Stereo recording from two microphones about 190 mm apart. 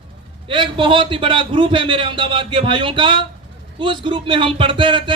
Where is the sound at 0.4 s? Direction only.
25° right (ahead or behind).